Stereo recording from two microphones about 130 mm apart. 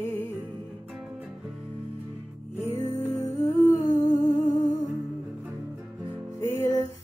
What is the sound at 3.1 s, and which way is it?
Music, 25° left (ahead or behind).